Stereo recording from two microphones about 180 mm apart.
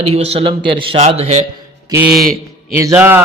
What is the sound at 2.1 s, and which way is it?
Speech, centre (ahead or behind).